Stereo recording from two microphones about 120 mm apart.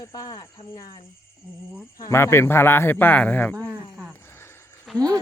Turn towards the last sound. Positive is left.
turn(degrees=-5)  # may be behind; listen again after turning